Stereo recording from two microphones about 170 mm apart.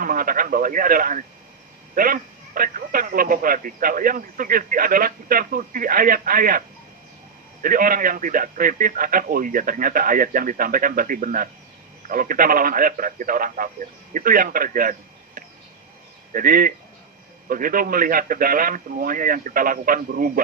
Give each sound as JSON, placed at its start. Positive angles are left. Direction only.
{"t": 0.0, "sound": "speech", "side_deg": -55}
{"t": 7.6, "sound": "speech", "side_deg": -55}
{"t": 16.3, "sound": "speech", "side_deg": -55}